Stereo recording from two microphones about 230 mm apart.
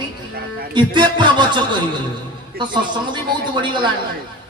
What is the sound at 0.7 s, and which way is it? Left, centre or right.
A man's voice, centre.